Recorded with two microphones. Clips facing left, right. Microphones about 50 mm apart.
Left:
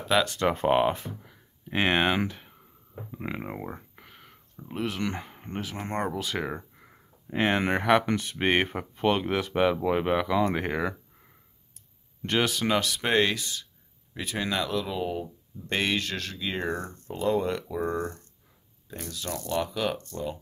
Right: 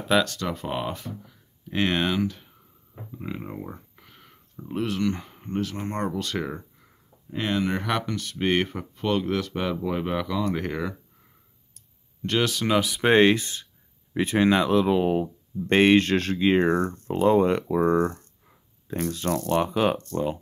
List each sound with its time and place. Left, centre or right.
0.4 s speech: left
4.0 s a sound: centre
5.1 s speech: centre
7.2 s speech: left
7.8 s speech: centre
12.3 s speech: centre
12.8 s speech: centre
13.2 s speech: right